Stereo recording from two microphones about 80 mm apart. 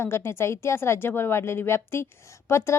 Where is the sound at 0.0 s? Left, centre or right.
Left.